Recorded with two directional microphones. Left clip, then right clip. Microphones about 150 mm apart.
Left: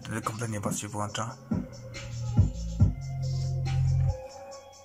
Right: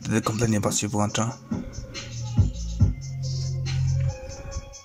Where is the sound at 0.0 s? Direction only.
50° right (ahead or behind).